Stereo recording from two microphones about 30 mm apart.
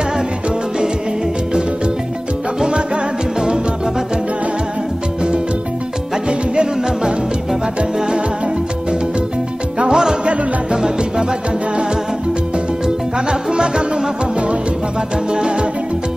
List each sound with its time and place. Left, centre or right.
6.2 s music: right
9.8 s music: right
12.8 s music: right
15.3 s music: right